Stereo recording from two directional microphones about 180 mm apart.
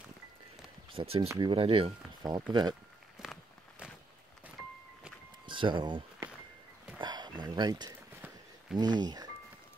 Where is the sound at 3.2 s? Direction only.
Centre (ahead or behind).